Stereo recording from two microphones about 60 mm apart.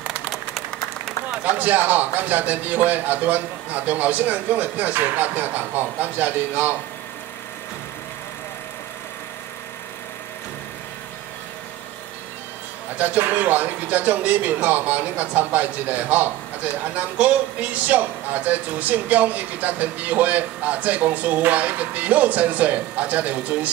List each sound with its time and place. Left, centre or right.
0.3 s applause: centre
1.4 s a man's voice: right
12.9 s a man's voice: right